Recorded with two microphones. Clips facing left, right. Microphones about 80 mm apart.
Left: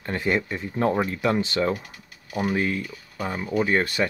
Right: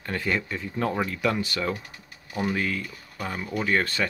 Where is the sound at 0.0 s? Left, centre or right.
Left.